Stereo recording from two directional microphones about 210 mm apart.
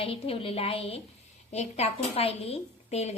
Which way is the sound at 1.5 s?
30° left (ahead or behind).